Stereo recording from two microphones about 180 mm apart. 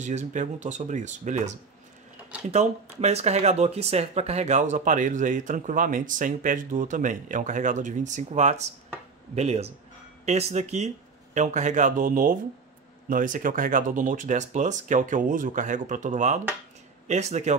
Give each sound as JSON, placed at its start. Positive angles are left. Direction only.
{"t": 0.0, "sound": "speech", "side_deg": -40}